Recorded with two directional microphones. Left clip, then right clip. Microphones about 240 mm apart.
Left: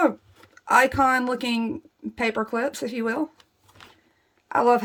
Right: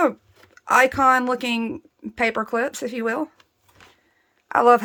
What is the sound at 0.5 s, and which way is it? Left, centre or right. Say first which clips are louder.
Speech: right 1 dB; centre.